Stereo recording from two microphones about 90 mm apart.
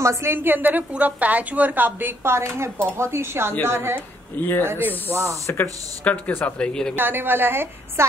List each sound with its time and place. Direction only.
0.0 s a woman's voice: 30° right (ahead or behind)
4.4 s speech: 20° left (ahead or behind)
5.1 s speech: 35° right (ahead or behind)
5.5 s speech: 20° left (ahead or behind)
7.0 s a woman's voice: 20° right (ahead or behind)